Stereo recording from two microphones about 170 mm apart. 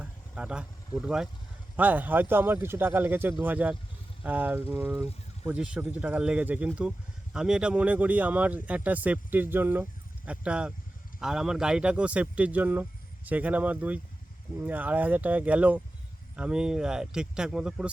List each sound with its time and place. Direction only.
0.0 s speech: 5° right (ahead or behind)
5.5 s speech: 5° right (ahead or behind)